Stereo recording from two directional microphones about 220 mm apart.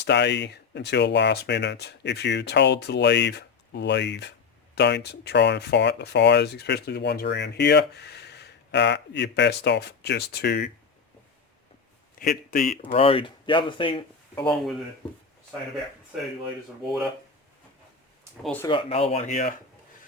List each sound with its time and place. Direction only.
0.0 s speech: 50° left (ahead or behind)
12.2 s speech: 40° left (ahead or behind)
12.8 s speech: 25° left (ahead or behind)
14.4 s speech: centre (ahead or behind)
18.4 s speech: 10° left (ahead or behind)
18.7 s speech: 25° left (ahead or behind)